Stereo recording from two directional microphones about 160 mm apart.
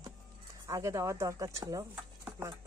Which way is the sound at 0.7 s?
20° right (ahead or behind).